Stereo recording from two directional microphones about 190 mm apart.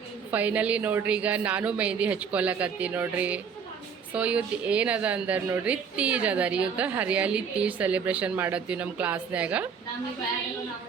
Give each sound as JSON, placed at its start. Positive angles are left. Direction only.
{"t": 0.3, "sound": "a woman's voice", "side_deg": -10}